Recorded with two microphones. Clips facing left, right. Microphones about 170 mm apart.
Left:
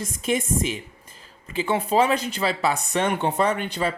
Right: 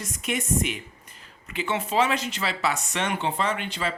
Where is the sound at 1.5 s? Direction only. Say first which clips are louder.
Left 5 dB; 35° left (ahead or behind).